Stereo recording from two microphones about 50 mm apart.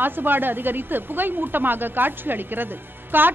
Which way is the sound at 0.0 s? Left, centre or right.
Right.